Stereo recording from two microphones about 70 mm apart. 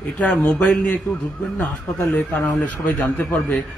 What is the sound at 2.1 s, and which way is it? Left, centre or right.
A man's voice, left.